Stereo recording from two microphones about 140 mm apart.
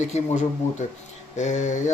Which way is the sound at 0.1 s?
55° left (ahead or behind).